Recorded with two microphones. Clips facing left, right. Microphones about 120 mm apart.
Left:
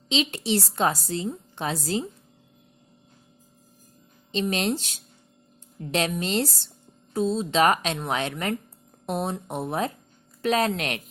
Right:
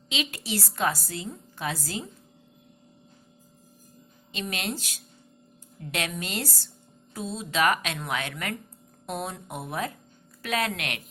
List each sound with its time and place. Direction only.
0.1 s a woman's voice: 30° left (ahead or behind)
4.3 s a woman's voice: 30° left (ahead or behind)